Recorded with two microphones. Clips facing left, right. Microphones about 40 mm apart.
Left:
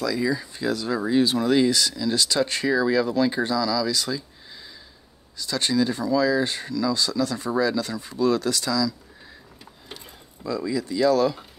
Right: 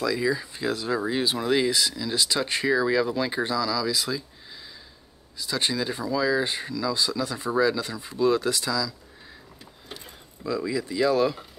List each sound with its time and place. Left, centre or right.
0.0 s speech: centre
0.7 s speech: right
0.9 s speech: centre
5.4 s speech: centre
10.4 s speech: centre